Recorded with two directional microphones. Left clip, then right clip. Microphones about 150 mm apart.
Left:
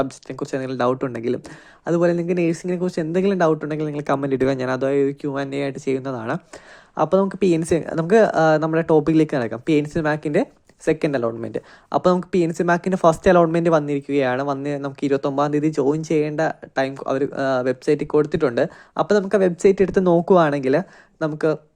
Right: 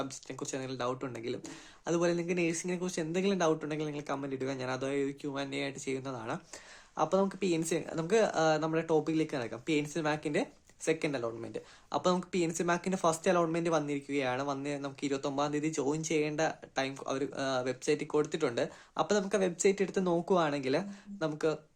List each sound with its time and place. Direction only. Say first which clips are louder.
0.0 s speech: left 14 dB; 40° left (ahead or behind)